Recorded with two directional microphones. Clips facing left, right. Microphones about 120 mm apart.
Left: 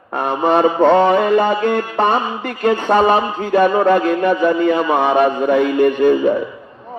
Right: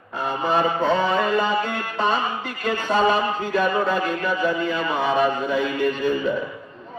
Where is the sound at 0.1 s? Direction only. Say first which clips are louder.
Left 7 dB; 65° left (ahead or behind).